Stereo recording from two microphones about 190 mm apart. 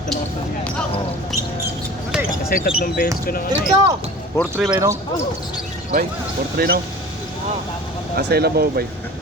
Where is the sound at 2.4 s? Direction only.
50° left (ahead or behind).